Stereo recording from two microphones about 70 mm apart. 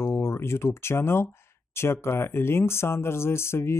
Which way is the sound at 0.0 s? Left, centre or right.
Left.